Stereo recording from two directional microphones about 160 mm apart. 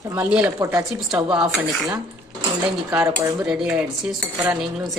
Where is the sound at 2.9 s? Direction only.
20° right (ahead or behind).